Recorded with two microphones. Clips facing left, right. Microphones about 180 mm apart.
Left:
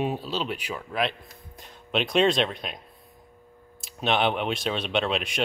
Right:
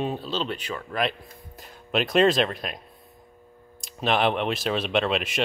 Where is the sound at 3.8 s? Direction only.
Centre (ahead or behind).